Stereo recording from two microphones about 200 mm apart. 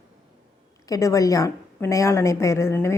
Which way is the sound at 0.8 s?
15° left (ahead or behind).